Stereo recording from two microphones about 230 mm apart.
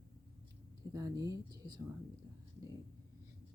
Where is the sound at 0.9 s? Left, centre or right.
Centre.